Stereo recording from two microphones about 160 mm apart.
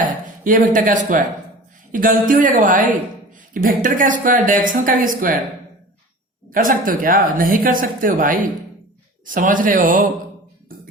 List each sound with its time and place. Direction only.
0.0 s speech: 55° right (ahead or behind)
6.5 s speech: 60° right (ahead or behind)